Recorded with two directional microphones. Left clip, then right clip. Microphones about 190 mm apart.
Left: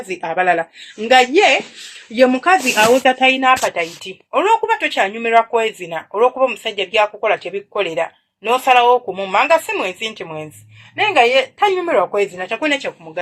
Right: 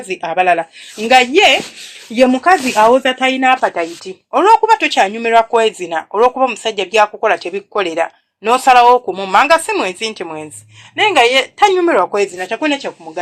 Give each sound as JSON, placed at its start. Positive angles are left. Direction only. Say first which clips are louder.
{"t": 0.1, "sound": "speech", "louder": "right 3 dB", "side_deg": -40}
{"t": 3.0, "sound": "speech", "louder": "even", "side_deg": -55}
{"t": 4.3, "sound": "speech", "louder": "right 5 dB", "side_deg": -25}